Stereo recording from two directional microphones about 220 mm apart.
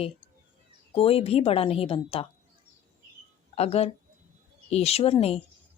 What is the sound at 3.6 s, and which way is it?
A woman's voice, 30° left (ahead or behind).